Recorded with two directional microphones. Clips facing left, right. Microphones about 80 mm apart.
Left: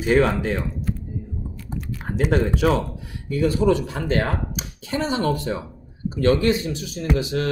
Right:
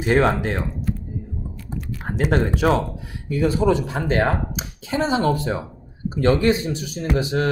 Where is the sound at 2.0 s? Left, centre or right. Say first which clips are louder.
Even; right.